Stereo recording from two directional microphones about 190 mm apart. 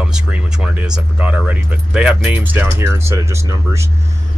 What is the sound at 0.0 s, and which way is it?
Speech, 5° right (ahead or behind).